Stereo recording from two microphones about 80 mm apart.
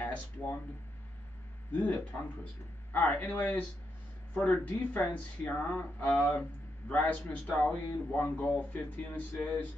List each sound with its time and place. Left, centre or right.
0.0 s speech: centre
1.7 s speech: centre